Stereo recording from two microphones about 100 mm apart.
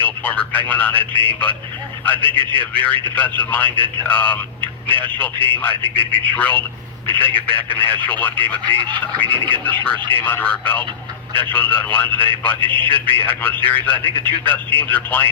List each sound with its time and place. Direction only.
0.0 s a man's voice: 15° left (ahead or behind)